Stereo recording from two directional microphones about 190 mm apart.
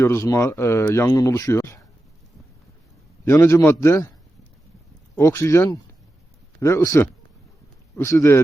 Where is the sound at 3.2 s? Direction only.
15° left (ahead or behind).